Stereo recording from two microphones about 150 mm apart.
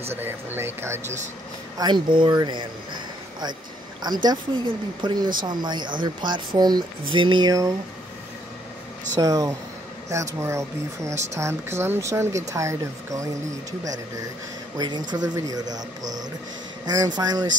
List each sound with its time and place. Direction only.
0.1 s speech: 15° right (ahead or behind)
1.0 s speech: 50° right (ahead or behind)
1.8 s speech: 30° right (ahead or behind)
4.0 s speech: 30° right (ahead or behind)
9.2 s speech: 25° right (ahead or behind)
16.8 s speech: 25° right (ahead or behind)